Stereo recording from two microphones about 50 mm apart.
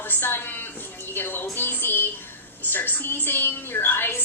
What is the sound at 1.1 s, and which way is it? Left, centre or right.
A woman's voice, left.